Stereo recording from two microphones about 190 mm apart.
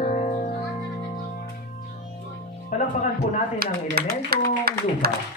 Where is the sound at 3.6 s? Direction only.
55° right (ahead or behind).